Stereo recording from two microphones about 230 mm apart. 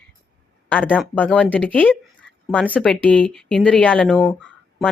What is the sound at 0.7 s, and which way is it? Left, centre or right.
A woman's voice, centre.